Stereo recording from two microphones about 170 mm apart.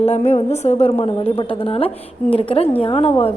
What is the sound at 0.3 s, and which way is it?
A woman's voice, 40° left (ahead or behind).